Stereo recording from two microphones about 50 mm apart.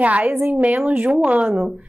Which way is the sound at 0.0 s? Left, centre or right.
Right.